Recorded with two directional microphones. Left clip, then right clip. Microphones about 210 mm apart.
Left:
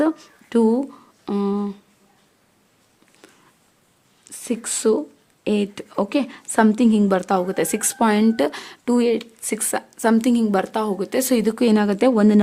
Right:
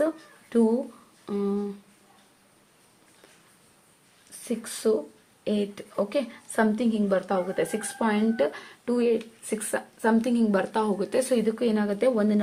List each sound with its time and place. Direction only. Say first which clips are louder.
0.5 s a woman's voice: left 5 dB; 50° left (ahead or behind)
1.2 s humming: left 5 dB; 50° left (ahead or behind)
4.4 s a woman's voice: left 6 dB; 50° left (ahead or behind)